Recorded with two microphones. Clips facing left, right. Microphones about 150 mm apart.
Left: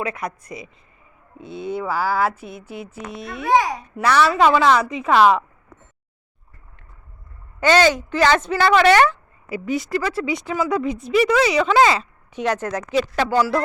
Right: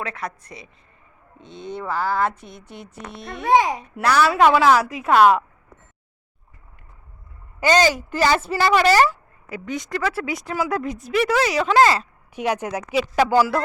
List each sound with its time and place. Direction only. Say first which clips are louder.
0.0 s a woman's voice: left 3 dB; 10° left (ahead or behind)
3.4 s a child's voice: right 1 dB; 25° right (ahead or behind)
3.9 s speech: left 1 dB; centre (ahead or behind)
7.6 s speech: left 2 dB; 10° right (ahead or behind)
9.5 s speech: left 5 dB; 5° left (ahead or behind)